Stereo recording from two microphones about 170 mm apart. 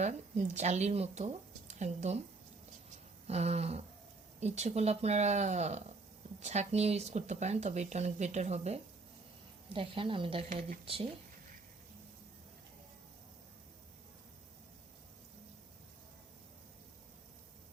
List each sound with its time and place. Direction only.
0.0 s speech: 45° right (ahead or behind)
3.2 s speech: 40° right (ahead or behind)